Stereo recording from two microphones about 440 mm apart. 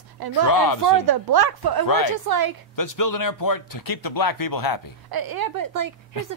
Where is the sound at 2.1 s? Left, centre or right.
Right.